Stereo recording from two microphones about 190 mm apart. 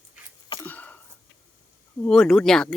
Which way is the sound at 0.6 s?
10° left (ahead or behind).